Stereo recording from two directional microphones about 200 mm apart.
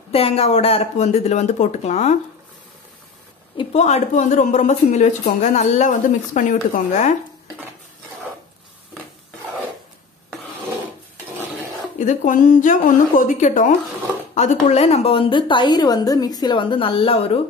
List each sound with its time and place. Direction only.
0.1 s a woman's voice: 30° left (ahead or behind)
3.5 s a woman's voice: 35° left (ahead or behind)
12.0 s a woman's voice: 40° left (ahead or behind)